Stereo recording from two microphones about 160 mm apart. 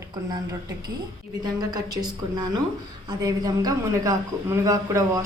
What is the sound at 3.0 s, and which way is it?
Speech, 25° right (ahead or behind).